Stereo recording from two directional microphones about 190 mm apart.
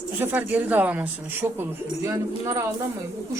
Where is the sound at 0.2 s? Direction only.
10° right (ahead or behind).